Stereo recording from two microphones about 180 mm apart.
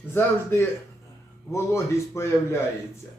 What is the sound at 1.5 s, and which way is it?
Speech, 15° left (ahead or behind).